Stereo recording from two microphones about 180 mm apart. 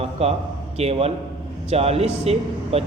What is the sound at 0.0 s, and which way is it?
A man's voice, 35° right (ahead or behind).